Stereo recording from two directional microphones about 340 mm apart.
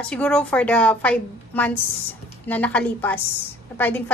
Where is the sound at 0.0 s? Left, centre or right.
Centre.